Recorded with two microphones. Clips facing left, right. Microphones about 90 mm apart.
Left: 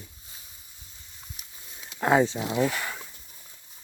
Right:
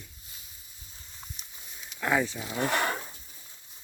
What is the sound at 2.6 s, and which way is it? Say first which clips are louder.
Speech: right 1 dB; 65° right (ahead or behind).